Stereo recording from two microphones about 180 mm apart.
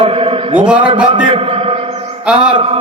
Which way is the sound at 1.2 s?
30° right (ahead or behind).